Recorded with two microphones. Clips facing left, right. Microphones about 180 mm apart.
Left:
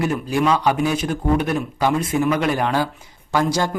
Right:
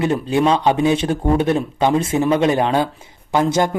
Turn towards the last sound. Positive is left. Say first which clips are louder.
# right 3 dB
turn(degrees=-25)  # may be behind; listen again after turning